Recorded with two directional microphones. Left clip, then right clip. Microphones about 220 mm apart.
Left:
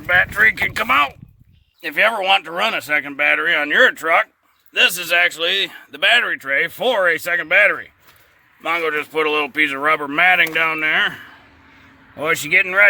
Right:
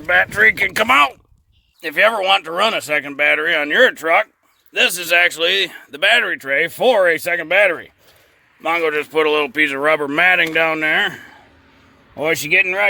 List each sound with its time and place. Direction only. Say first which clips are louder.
0.0 s a man's voice: right 1 dB; 40° right (ahead or behind); by 12.8 s 20° right (ahead or behind)